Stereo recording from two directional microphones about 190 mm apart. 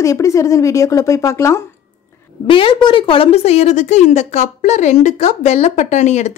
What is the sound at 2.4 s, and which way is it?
Speech, 25° left (ahead or behind).